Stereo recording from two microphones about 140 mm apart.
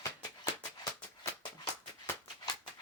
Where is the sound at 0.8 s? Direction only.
20° left (ahead or behind).